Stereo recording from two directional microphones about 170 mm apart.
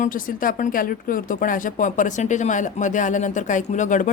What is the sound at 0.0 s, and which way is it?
Speech, 55° left (ahead or behind).